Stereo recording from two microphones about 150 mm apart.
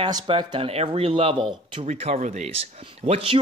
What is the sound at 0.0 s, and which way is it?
Speech, 30° right (ahead or behind).